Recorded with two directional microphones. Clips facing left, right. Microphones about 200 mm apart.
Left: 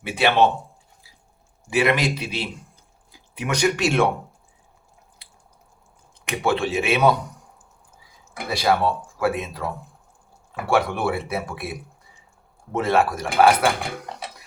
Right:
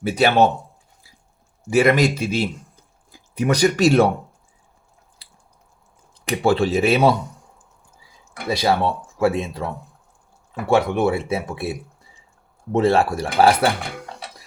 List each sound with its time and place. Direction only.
0.0 s speech: 40° right (ahead or behind)
1.7 s a man's voice: 45° right (ahead or behind)
5.2 s drip: 35° right (ahead or behind)
6.2 s speech: 35° right (ahead or behind)
8.4 s speech: 25° right (ahead or behind)
10.7 s speech: 20° right (ahead or behind)